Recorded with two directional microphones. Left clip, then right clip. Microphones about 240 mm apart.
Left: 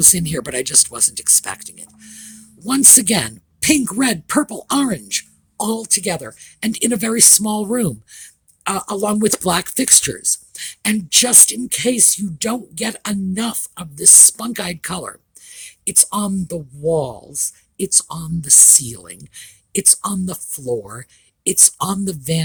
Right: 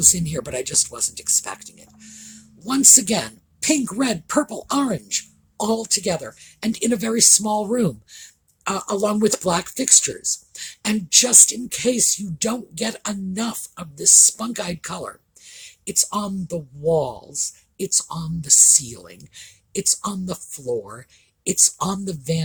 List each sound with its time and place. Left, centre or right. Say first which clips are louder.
0.0 s speech: left 3 dB; left